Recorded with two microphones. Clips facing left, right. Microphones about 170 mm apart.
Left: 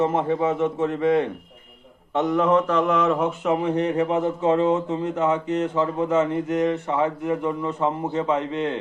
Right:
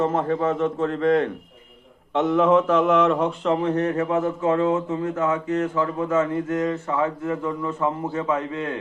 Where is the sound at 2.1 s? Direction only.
Centre (ahead or behind); by 8.8 s 20° left (ahead or behind).